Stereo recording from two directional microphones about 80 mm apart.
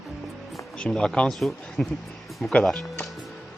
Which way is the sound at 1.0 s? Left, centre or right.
Centre.